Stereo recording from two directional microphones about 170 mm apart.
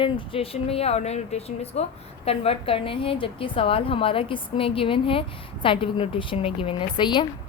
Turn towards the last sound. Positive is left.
turn(degrees=25)  # may be behind; listen again after turning